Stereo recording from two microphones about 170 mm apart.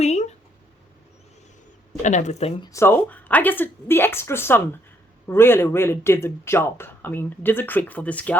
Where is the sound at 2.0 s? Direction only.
45° left (ahead or behind).